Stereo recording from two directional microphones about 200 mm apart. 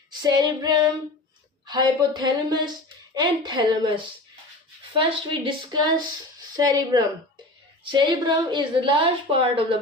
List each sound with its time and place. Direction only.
0.2 s a woman's voice: 20° right (ahead or behind)